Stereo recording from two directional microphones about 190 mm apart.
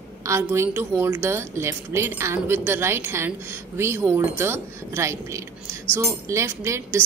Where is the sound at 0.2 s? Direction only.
15° right (ahead or behind).